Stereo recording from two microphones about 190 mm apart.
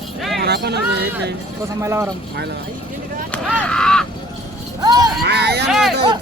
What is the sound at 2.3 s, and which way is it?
Speech, 60° right (ahead or behind).